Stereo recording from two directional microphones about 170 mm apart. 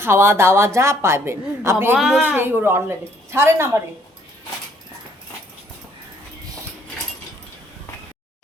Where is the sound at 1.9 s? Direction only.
Centre (ahead or behind).